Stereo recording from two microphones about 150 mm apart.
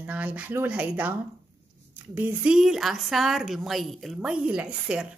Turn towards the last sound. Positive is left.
turn(degrees=-5)  # may be behind; listen again after turning